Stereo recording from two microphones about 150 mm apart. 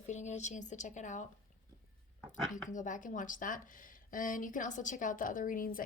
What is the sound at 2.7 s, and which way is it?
Speech, 60° left (ahead or behind).